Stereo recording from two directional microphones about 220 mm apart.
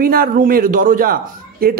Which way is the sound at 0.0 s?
40° right (ahead or behind).